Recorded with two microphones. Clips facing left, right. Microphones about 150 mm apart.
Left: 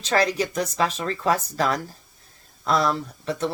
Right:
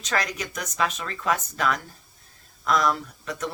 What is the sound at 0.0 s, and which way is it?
Speech, 30° left (ahead or behind).